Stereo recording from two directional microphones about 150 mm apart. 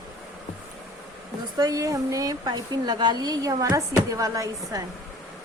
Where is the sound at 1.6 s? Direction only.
25° right (ahead or behind).